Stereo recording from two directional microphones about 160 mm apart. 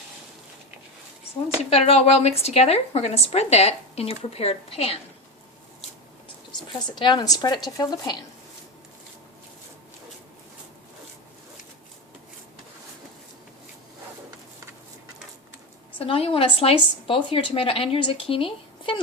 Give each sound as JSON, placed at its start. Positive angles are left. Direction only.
{"t": 1.7, "sound": "speech", "side_deg": 40}
{"t": 6.7, "sound": "a woman's voice", "side_deg": 30}
{"t": 16.0, "sound": "speech", "side_deg": 35}